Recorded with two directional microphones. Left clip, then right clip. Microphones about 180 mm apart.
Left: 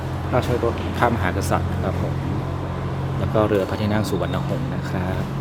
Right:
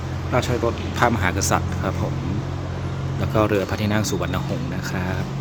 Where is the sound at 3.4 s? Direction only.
10° right (ahead or behind).